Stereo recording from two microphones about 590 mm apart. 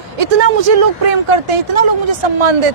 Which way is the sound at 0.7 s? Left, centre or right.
Right.